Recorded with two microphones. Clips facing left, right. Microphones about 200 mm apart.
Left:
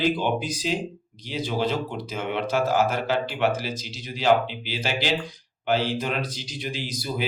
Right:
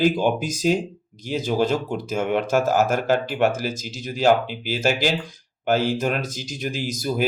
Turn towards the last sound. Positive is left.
turn(degrees=-45)  # may be behind; listen again after turning